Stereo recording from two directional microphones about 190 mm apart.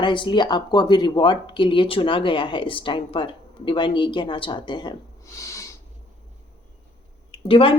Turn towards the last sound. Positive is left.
turn(degrees=30)  # may be behind; listen again after turning